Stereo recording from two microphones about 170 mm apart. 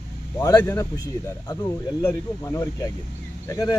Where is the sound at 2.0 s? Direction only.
15° left (ahead or behind).